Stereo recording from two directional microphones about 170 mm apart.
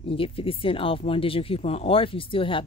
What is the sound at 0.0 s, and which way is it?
Speech, 30° left (ahead or behind).